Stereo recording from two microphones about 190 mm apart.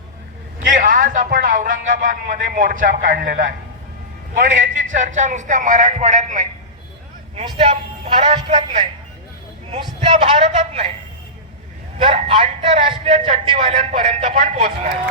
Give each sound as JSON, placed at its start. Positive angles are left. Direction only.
{"t": 0.7, "sound": "speech", "side_deg": -45}
{"t": 4.5, "sound": "a man's voice", "side_deg": -45}
{"t": 8.0, "sound": "a man's voice", "side_deg": -30}
{"t": 10.2, "sound": "a man's voice", "side_deg": -35}
{"t": 11.9, "sound": "a man's voice", "side_deg": -30}